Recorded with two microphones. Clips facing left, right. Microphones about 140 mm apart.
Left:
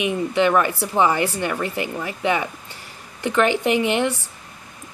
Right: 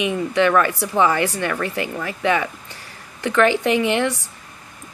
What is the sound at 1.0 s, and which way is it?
Speech, 25° left (ahead or behind).